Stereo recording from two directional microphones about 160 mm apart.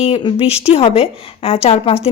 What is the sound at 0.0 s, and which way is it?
A woman's voice, 35° left (ahead or behind).